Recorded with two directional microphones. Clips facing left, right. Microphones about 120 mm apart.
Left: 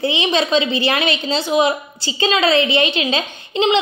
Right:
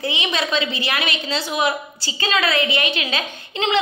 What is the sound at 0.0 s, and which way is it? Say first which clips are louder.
A woman's voice: left 6 dB; 30° left (ahead or behind).